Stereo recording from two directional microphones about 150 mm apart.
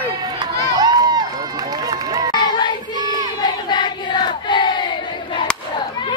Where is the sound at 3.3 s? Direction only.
30° left (ahead or behind).